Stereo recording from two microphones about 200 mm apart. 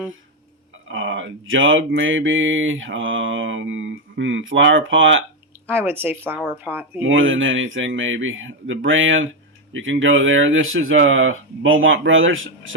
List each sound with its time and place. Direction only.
0.9 s mantra: 70° right (ahead or behind)
5.6 s speech: 10° right (ahead or behind)
7.0 s mantra: 75° right (ahead or behind)
9.7 s speech: 70° right (ahead or behind)